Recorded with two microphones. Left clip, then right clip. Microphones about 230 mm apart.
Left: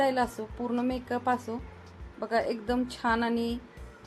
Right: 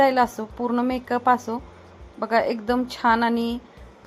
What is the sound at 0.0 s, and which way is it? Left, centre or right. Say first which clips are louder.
A woman's voice: right 8 dB; centre.